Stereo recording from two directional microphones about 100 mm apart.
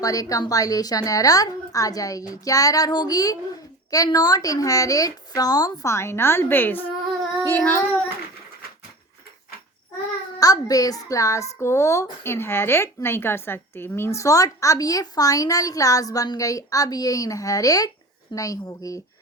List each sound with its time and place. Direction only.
0.0 s a child's voice: 35° left (ahead or behind)
7.4 s child singing: 20° left (ahead or behind)
10.4 s a child's voice: 35° left (ahead or behind)